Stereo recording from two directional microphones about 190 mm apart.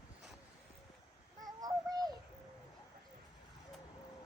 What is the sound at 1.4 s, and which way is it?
Child singing, 20° right (ahead or behind).